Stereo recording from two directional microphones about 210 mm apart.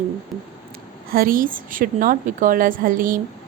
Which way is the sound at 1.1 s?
40° right (ahead or behind).